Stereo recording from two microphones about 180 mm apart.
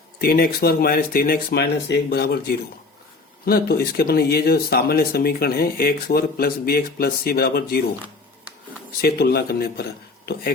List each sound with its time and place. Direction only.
0.2 s speech: 55° left (ahead or behind)
9.0 s speech: 60° left (ahead or behind)